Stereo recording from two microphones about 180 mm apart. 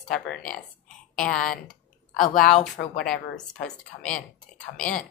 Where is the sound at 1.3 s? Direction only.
45° left (ahead or behind).